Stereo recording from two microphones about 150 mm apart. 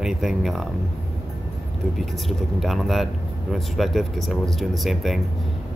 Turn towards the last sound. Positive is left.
turn(degrees=0)  # may be behind; listen again after turning